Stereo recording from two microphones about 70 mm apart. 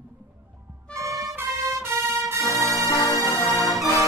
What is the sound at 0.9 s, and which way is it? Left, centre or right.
Music, right.